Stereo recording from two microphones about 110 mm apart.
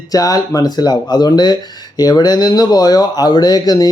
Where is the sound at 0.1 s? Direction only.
35° left (ahead or behind).